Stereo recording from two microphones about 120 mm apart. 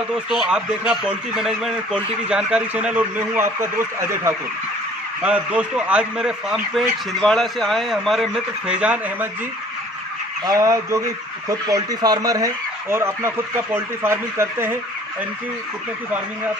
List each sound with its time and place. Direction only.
0.3 s speech: 5° right (ahead or behind); by 4.4 s 20° right (ahead or behind)
5.2 s speech: 10° right (ahead or behind)
10.4 s speech: 30° right (ahead or behind)